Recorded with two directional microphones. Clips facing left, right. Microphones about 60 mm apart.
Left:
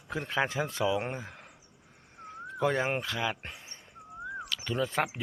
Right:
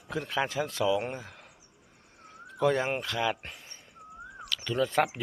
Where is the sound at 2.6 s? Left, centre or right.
Left.